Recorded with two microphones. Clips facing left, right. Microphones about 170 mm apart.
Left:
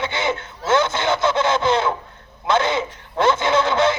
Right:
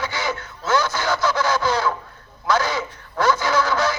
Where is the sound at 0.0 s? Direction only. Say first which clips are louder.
Left 3 dB; 25° left (ahead or behind).